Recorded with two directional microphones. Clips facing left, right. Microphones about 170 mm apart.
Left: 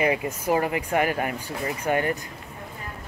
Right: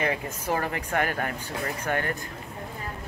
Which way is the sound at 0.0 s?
10° left (ahead or behind).